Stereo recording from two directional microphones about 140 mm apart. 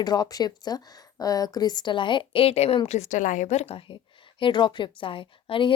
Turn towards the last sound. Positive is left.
turn(degrees=40)  # may be behind; listen again after turning